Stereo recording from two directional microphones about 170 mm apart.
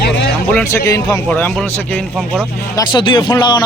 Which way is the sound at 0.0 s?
75° left (ahead or behind).